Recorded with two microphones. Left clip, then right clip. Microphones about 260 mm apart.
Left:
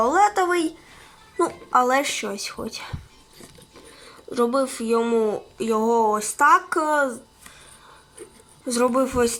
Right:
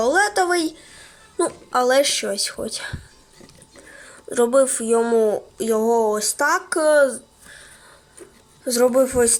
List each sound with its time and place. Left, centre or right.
0.0 s a sound: centre
1.4 s speech: centre
4.3 s speech: right
8.8 s speech: centre